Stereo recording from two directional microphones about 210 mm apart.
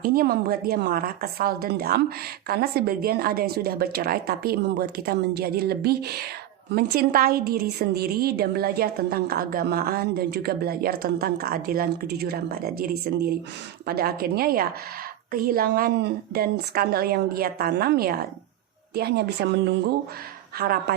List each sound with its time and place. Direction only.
0.0 s a woman's voice: 45° right (ahead or behind)